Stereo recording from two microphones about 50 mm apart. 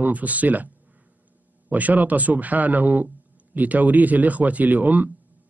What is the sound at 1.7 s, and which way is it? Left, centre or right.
A man's voice, right.